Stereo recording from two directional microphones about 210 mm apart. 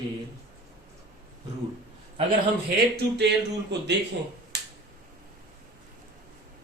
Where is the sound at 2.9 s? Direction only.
55° right (ahead or behind).